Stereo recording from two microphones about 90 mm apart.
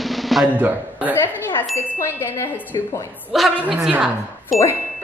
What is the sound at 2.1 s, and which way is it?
Speech, 25° left (ahead or behind).